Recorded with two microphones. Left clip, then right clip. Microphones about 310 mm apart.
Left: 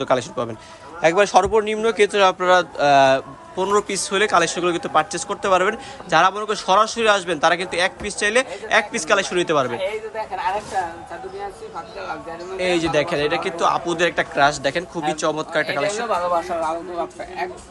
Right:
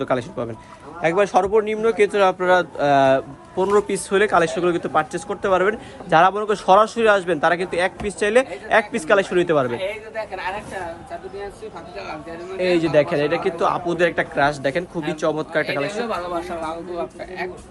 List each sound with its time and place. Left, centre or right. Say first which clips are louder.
0.0 s speech: left 2 dB; centre
9.7 s speech: left 1 dB; centre
12.5 s speech: right 2 dB; centre
16.0 s speech: left 5 dB; centre